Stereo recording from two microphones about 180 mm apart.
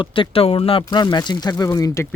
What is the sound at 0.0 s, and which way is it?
Speech, 30° left (ahead or behind).